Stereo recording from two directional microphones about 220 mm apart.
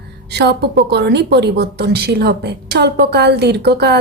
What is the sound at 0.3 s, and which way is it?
A woman's voice, 50° right (ahead or behind).